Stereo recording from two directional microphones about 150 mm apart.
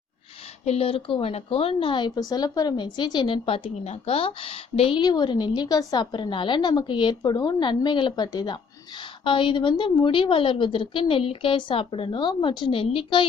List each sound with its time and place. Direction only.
0.6 s speech: 45° left (ahead or behind)